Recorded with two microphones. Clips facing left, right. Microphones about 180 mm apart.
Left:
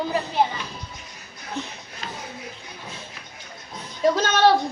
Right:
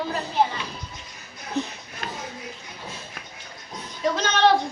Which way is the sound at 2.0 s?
55° right (ahead or behind).